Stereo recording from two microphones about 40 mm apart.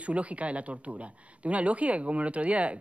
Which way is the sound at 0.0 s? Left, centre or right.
Right.